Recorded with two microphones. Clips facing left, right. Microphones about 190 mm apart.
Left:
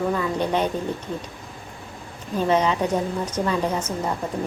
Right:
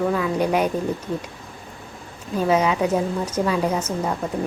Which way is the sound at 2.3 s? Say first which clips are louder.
Right 1 dB; 10° right (ahead or behind).